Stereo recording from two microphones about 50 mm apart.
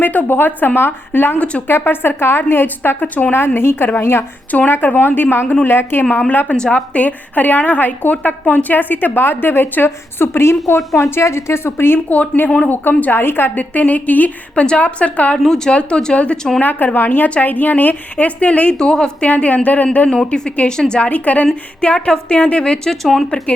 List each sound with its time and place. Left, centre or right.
0.0 s a woman's voice: left
4.5 s a woman's voice: left
4.9 s a woman's voice: left
6.5 s a woman's voice: left
11.1 s a woman's voice: left
12.0 s a woman's voice: left
13.6 s a woman's voice: left
15.4 s a woman's voice: centre
16.6 s a woman's voice: left
18.8 s a woman's voice: centre
19.3 s a woman's voice: left
20.1 s a woman's voice: centre
21.1 s a woman's voice: left; by 23.2 s centre